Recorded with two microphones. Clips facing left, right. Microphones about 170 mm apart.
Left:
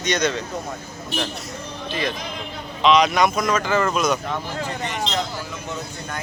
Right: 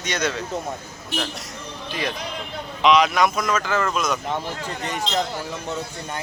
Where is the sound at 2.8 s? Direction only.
5° right (ahead or behind).